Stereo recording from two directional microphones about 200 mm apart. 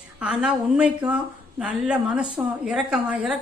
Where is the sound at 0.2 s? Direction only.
5° right (ahead or behind).